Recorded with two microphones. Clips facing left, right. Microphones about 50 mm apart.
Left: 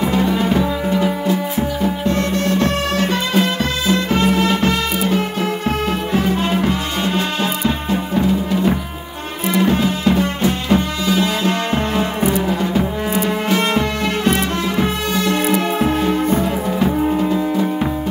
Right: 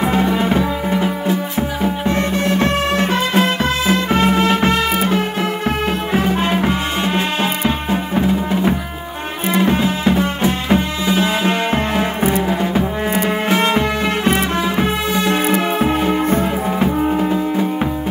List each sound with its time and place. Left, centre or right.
0.0 s music: right